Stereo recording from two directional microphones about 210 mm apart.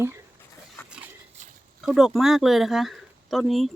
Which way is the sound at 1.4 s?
35° right (ahead or behind).